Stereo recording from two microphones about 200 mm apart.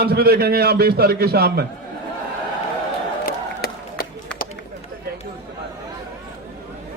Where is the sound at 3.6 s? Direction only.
50° left (ahead or behind).